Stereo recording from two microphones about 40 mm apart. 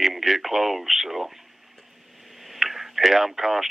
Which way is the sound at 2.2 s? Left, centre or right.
Centre.